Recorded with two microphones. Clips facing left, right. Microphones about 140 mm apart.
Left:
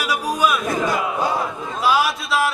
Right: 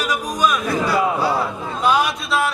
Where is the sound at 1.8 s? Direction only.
5° left (ahead or behind).